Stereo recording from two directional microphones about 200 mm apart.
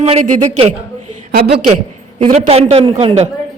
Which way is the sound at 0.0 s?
35° right (ahead or behind).